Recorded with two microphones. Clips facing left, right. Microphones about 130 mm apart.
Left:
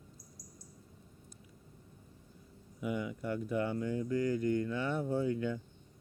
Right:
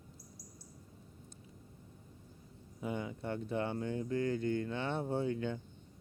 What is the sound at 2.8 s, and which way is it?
Speech, 30° right (ahead or behind).